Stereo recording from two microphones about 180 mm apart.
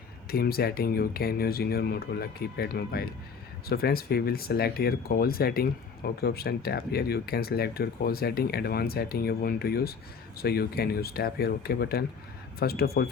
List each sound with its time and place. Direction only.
0.3 s speech: 60° left (ahead or behind)